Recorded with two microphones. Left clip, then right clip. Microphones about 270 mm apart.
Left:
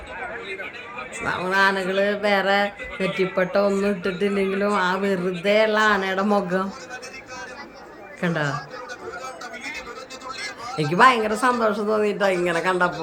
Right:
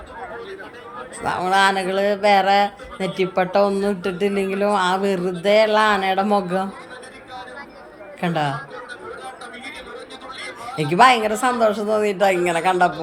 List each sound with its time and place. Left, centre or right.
1.2 s speech: centre
8.2 s speech: centre
10.8 s speech: centre